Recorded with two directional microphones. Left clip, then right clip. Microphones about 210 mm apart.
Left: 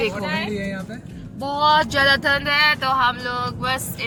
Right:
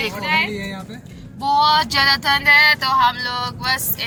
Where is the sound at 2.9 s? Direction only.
Centre (ahead or behind).